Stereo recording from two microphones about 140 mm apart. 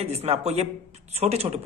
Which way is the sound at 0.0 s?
50° right (ahead or behind).